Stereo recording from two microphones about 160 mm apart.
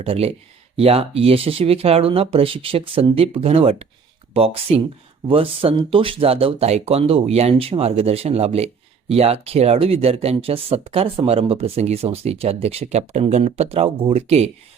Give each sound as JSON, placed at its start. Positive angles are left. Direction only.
{"t": 0.0, "sound": "speech", "side_deg": -40}